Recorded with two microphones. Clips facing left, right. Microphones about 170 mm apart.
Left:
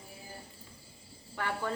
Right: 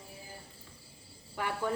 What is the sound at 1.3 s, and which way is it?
Cricket, 15° right (ahead or behind).